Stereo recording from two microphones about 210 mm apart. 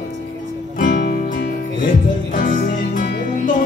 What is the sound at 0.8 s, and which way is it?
Music, 40° left (ahead or behind).